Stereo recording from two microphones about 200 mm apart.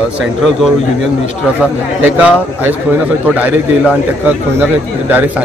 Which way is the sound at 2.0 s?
5° right (ahead or behind).